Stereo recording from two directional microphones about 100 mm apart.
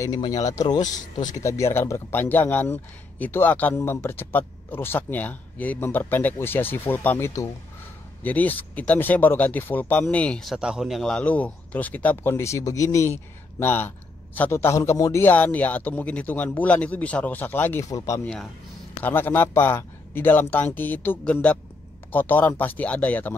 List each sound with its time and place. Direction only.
0.3 s speech: 35° left (ahead or behind)
8.2 s speech: 15° left (ahead or behind)
10.4 s speech: 5° right (ahead or behind); by 15.2 s 30° left (ahead or behind)
15.2 s speech: 15° left (ahead or behind)
17.8 s speech: 30° left (ahead or behind)
18.2 s speech: 5° left (ahead or behind)
19.0 s speech: 20° left (ahead or behind)